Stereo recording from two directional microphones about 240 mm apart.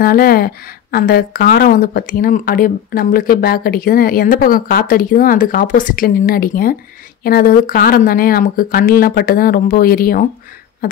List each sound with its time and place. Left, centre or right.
0.0 s speech: left